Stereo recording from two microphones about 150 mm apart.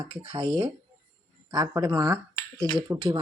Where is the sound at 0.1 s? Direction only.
35° right (ahead or behind).